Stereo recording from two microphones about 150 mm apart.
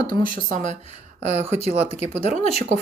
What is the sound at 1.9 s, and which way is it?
Speech, 45° left (ahead or behind).